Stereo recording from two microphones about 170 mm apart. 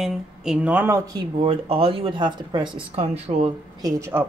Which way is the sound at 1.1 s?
35° right (ahead or behind).